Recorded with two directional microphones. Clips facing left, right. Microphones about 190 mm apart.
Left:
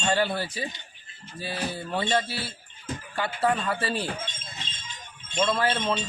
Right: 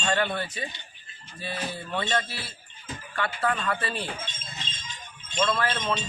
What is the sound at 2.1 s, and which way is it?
Speech, 5° left (ahead or behind).